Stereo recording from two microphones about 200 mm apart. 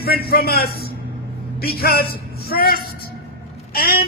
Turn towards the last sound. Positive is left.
turn(degrees=50)  # may be behind; listen again after turning